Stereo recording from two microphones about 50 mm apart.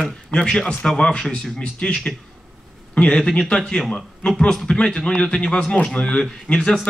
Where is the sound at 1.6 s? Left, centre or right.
Left.